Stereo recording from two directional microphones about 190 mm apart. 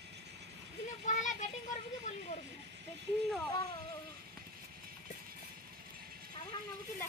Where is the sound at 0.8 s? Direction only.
40° left (ahead or behind).